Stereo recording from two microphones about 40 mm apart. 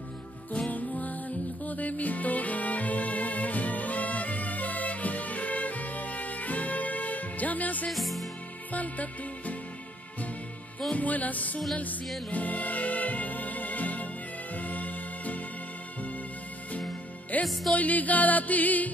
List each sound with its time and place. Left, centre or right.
0.7 s music: left
7.9 s music: centre
8.7 s music: left
10.9 s music: left
17.3 s music: left